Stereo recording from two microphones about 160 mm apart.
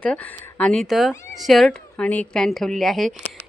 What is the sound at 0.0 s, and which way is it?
A woman's voice, 10° left (ahead or behind).